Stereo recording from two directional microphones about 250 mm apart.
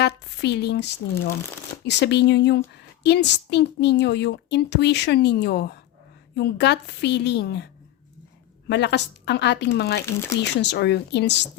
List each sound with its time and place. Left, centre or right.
0.0 s a woman's voice: left